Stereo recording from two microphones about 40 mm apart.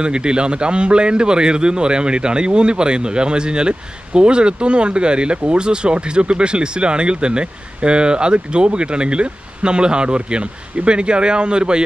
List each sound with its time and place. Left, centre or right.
0.0 s a man's voice: right